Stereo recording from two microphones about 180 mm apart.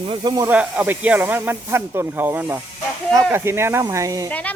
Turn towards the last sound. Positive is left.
turn(degrees=10)  # may be behind; listen again after turning